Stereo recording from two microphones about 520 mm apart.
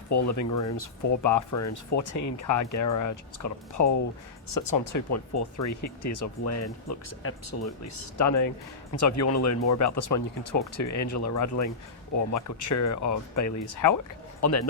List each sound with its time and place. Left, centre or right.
0.1 s speech: left